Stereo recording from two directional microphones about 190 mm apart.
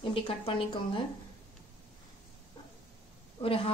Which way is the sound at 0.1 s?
30° left (ahead or behind).